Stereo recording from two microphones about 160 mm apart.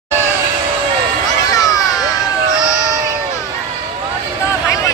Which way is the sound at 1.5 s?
20° left (ahead or behind).